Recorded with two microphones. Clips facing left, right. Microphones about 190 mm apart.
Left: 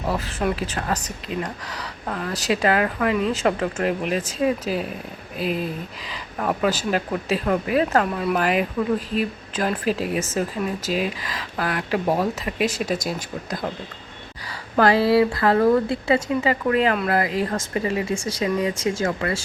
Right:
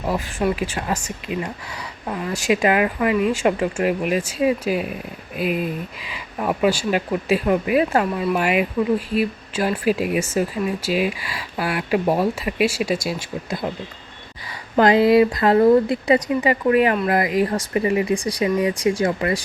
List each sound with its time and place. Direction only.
0.0 s speech: 15° right (ahead or behind)
14.8 s speech: 20° right (ahead or behind)